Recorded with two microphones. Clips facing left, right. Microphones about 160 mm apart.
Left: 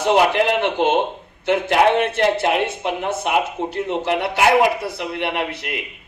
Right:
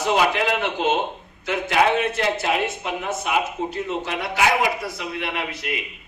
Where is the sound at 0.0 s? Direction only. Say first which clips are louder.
Left 4 dB; 65° left (ahead or behind).